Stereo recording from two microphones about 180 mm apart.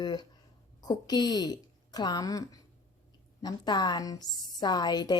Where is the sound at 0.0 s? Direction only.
25° left (ahead or behind).